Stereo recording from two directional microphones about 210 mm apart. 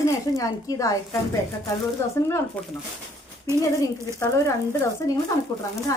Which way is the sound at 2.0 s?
10° left (ahead or behind).